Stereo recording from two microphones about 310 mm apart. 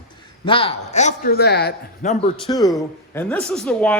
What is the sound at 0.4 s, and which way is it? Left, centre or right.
A man's voice, centre.